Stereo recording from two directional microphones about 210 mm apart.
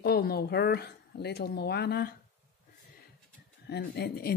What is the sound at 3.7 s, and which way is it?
Speech, 50° left (ahead or behind).